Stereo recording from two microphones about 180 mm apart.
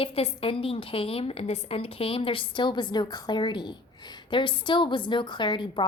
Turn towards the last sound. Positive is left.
turn(degrees=25)  # may be behind; listen again after turning